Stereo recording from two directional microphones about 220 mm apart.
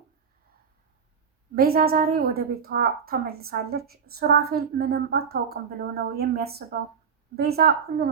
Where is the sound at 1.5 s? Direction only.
45° right (ahead or behind).